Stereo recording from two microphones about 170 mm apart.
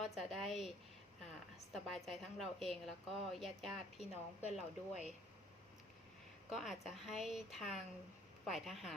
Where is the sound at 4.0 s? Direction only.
40° left (ahead or behind).